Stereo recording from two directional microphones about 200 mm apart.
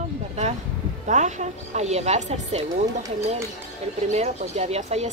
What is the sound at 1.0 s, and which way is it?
Speech, 35° right (ahead or behind).